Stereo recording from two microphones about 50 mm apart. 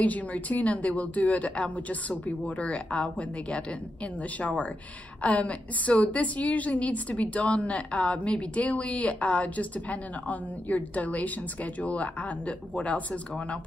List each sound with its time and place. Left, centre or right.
0.0 s a woman's voice: left